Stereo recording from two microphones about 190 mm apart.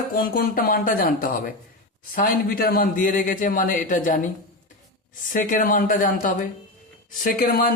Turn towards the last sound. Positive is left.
turn(degrees=50)  # may be behind; listen again after turning